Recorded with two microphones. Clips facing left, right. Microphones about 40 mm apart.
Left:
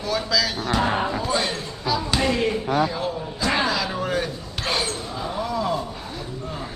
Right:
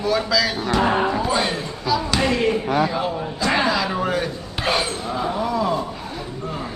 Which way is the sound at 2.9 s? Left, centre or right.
Centre.